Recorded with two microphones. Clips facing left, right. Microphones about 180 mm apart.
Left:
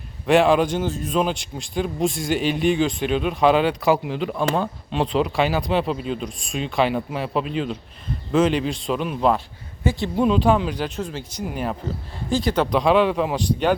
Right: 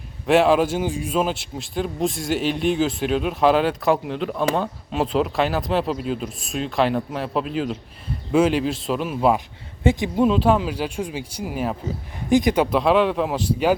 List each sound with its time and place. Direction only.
0.3 s a man's voice: 5° right (ahead or behind)
9.8 s speech: 20° right (ahead or behind)
10.2 s a man's voice: centre (ahead or behind)
12.3 s speech: 15° right (ahead or behind)
12.7 s a man's voice: centre (ahead or behind)